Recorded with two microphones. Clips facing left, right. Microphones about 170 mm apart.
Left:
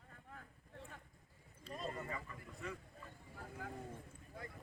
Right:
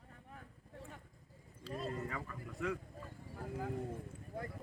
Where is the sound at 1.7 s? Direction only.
90° right.